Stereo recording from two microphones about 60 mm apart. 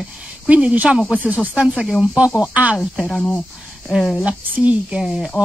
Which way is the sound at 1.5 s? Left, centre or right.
Centre.